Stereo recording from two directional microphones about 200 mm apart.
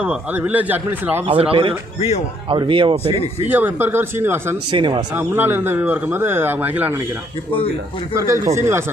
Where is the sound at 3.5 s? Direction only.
10° right (ahead or behind).